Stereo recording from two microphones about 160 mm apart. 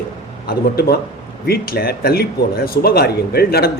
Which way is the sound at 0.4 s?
75° left (ahead or behind).